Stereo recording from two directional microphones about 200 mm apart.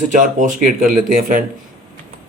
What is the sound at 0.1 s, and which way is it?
Speech, 40° right (ahead or behind).